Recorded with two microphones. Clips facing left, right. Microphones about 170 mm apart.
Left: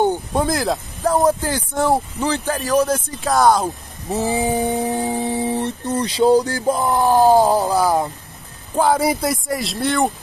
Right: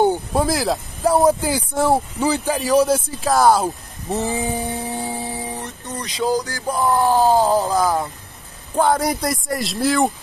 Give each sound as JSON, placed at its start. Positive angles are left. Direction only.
{"t": 0.3, "sound": "speech", "side_deg": 0}
{"t": 4.2, "sound": "speech", "side_deg": 15}
{"t": 8.7, "sound": "speech", "side_deg": 5}